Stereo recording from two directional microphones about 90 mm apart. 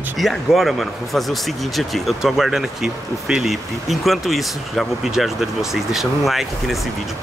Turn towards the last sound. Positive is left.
turn(degrees=0)  # may be behind; listen again after turning